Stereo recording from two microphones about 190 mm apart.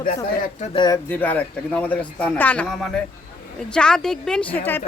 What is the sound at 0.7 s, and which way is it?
Speech, 25° left (ahead or behind).